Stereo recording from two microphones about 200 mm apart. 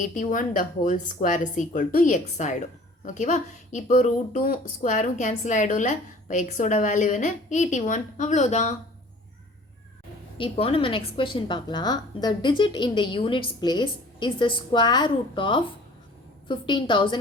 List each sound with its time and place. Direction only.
0.0 s speech: 40° left (ahead or behind)
10.3 s a woman's voice: 25° left (ahead or behind)